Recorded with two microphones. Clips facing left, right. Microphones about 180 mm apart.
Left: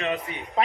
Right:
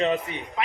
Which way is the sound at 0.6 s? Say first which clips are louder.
Left 5 dB; 35° left (ahead or behind).